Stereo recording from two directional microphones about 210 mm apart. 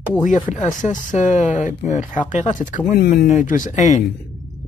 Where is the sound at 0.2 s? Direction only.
35° left (ahead or behind).